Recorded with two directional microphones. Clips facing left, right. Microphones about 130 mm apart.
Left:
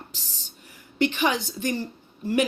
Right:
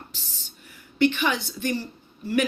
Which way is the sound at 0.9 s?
35° left (ahead or behind).